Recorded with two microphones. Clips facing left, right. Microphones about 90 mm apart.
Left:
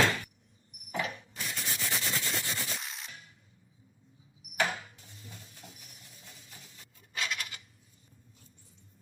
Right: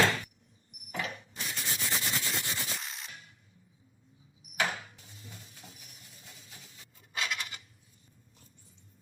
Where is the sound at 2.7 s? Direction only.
Centre (ahead or behind).